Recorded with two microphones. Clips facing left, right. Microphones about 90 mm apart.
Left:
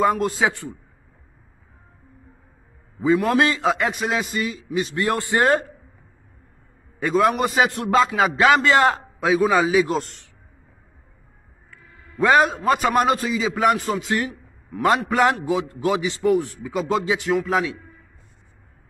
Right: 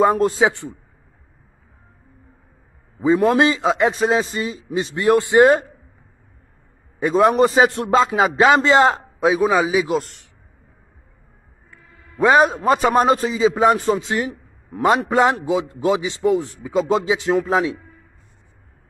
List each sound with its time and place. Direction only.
0.0 s a man's voice: 30° right (ahead or behind)
3.0 s a man's voice: 20° right (ahead or behind)
7.0 s a man's voice: 20° right (ahead or behind)
12.2 s a man's voice: 20° right (ahead or behind)